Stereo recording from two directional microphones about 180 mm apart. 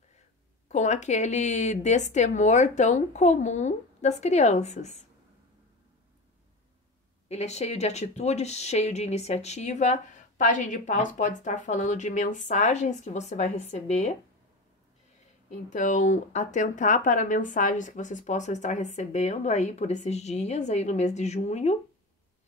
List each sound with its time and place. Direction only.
0.7 s speech: 40° left (ahead or behind)
7.2 s speech: 35° left (ahead or behind)
15.7 s speech: 45° left (ahead or behind)